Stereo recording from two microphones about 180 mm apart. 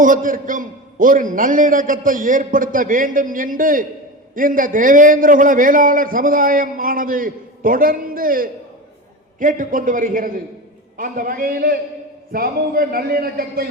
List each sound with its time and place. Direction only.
0.0 s a man's voice: 50° right (ahead or behind)